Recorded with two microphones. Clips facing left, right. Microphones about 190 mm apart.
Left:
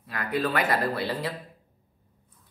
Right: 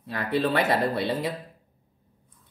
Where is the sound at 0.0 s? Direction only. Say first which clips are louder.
Right 3 dB; 30° right (ahead or behind).